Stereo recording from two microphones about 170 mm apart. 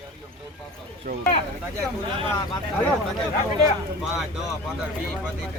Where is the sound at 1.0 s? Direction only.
55° right (ahead or behind).